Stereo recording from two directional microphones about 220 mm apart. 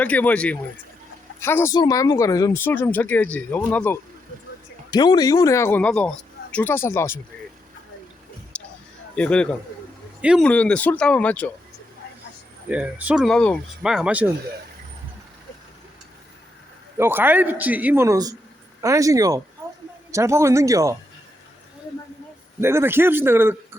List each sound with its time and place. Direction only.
0.0 s speech: 5° left (ahead or behind)
4.9 s speech: 20° left (ahead or behind)
8.5 s a sound: 5° left (ahead or behind)
9.1 s speech: 5° left (ahead or behind)
12.6 s speech: 5° right (ahead or behind)
17.0 s a man's voice: 10° right (ahead or behind)
22.6 s a man's voice: 10° right (ahead or behind)